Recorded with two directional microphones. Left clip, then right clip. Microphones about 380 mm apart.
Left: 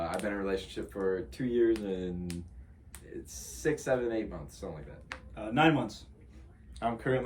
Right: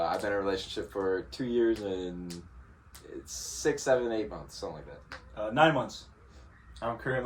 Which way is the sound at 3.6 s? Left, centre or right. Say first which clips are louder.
Right 3 dB; centre.